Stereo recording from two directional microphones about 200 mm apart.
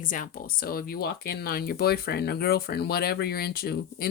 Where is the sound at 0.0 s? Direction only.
40° left (ahead or behind).